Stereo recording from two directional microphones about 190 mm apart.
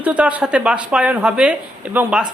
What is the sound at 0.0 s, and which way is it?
Speech, 5° right (ahead or behind).